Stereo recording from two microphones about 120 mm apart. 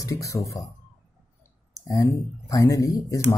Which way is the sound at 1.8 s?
30° left (ahead or behind).